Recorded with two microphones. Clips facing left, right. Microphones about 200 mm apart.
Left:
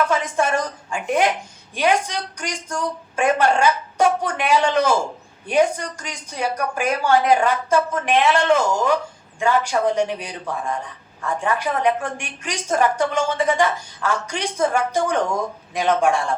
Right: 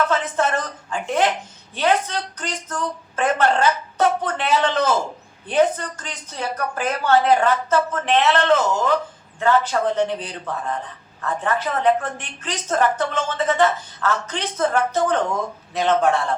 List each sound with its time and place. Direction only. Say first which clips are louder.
0.1 s a woman's voice: left 1 dB; 10° left (ahead or behind)